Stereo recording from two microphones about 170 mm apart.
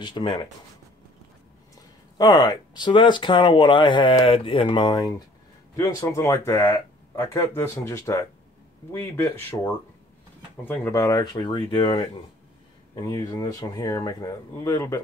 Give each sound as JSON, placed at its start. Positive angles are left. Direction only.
{"t": 0.0, "sound": "speech", "side_deg": 25}
{"t": 2.1, "sound": "speech", "side_deg": 25}
{"t": 10.6, "sound": "speech", "side_deg": 10}